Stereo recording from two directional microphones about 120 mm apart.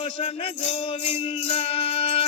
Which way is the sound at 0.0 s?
50° left (ahead or behind).